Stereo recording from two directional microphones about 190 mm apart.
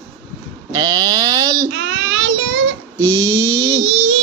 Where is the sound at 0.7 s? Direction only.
20° right (ahead or behind).